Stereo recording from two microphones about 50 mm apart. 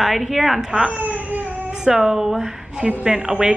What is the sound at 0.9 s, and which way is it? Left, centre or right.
Speech, right.